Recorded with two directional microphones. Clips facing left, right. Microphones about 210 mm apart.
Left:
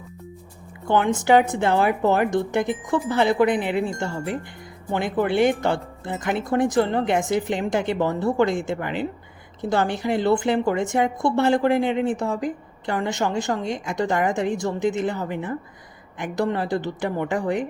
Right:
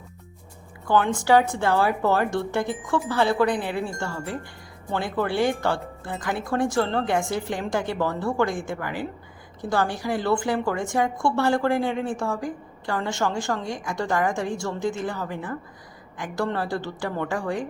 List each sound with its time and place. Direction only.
0.9 s a woman's voice: 20° left (ahead or behind)